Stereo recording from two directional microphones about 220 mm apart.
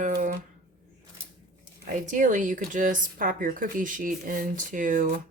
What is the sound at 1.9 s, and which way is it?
Speech, 35° right (ahead or behind).